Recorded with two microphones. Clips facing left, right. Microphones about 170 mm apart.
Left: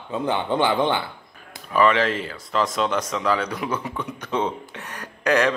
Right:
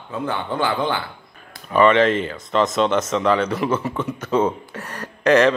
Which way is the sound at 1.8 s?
5° left (ahead or behind).